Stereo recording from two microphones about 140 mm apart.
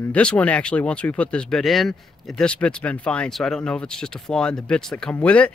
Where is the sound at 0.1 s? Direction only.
10° left (ahead or behind).